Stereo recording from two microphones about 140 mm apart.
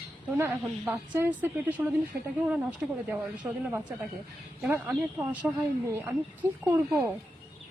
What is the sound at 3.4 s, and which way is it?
Speech, 20° right (ahead or behind).